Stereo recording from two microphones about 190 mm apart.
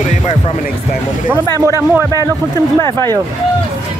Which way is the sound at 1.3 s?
15° right (ahead or behind).